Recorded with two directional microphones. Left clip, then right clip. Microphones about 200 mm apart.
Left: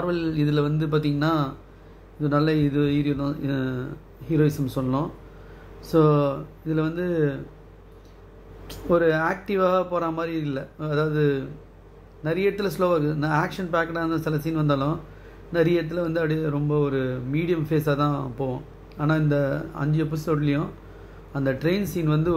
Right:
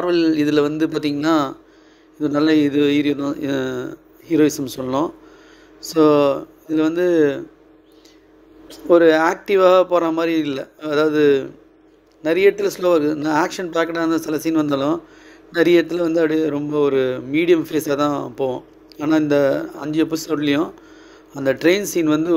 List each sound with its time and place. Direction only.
0.0 s a man's voice: 40° right (ahead or behind)
8.8 s a man's voice: 40° right (ahead or behind)